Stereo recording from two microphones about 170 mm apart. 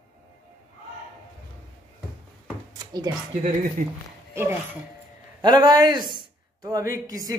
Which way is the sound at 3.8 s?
55° right (ahead or behind).